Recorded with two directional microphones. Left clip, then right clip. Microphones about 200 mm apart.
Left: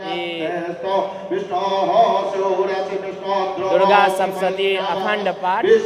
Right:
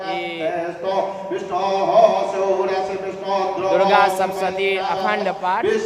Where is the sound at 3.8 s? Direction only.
Centre (ahead or behind).